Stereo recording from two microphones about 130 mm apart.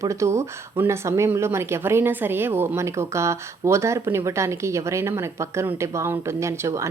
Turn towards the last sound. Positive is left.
turn(degrees=-20)  # may be behind; listen again after turning